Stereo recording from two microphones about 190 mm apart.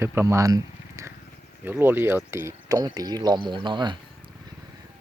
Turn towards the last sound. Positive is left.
turn(degrees=-25)  # may be behind; listen again after turning